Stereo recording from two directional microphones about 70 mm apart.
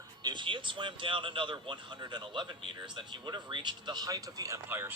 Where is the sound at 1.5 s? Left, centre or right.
Right.